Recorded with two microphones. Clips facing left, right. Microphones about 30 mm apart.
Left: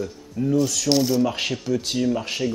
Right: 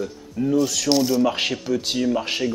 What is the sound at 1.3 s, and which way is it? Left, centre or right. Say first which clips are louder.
Speech: right 2 dB; centre.